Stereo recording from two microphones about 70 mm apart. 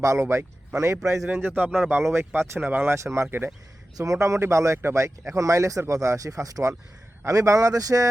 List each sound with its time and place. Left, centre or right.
0.0 s speech: right
1.3 s speech: right
3.9 s speech: right